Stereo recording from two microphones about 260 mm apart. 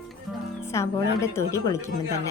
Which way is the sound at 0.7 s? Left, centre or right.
Centre.